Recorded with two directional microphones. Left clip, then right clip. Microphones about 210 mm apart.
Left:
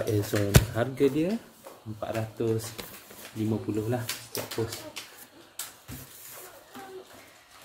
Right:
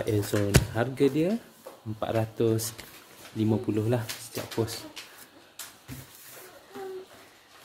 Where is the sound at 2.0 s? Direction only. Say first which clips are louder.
Right 4 dB; 45° right (ahead or behind).